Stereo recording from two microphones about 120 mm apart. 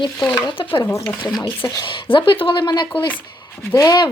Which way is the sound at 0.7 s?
20° left (ahead or behind).